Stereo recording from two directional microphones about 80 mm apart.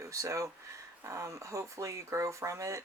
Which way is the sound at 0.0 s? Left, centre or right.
Right.